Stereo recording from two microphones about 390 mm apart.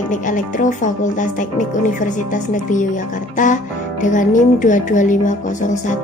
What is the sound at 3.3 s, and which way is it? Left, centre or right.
Guitar, centre.